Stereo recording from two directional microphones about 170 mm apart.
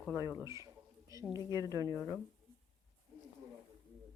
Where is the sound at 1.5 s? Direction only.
20° right (ahead or behind).